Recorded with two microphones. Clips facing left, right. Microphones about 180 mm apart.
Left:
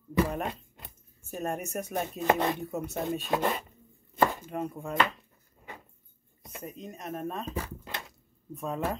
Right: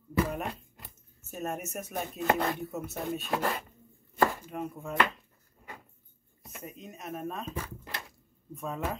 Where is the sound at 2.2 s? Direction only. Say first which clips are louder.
Left 2 dB; 20° left (ahead or behind).